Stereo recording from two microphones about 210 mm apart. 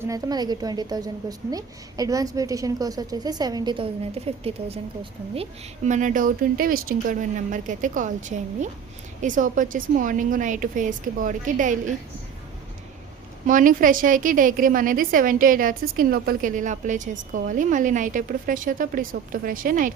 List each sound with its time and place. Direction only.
0.0 s a woman's voice: 15° right (ahead or behind); by 11.9 s 35° right (ahead or behind)
13.5 s a woman's voice: 40° right (ahead or behind)